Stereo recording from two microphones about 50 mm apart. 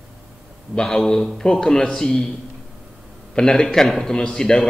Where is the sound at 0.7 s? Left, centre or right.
Centre.